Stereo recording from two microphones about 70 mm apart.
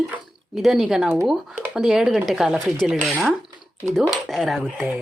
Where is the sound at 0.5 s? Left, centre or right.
Centre.